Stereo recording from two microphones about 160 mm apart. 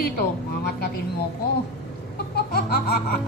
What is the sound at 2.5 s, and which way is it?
Music, 75° left (ahead or behind).